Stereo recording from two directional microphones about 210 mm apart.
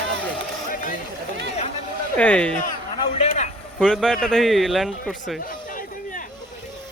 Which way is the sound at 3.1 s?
35° left (ahead or behind).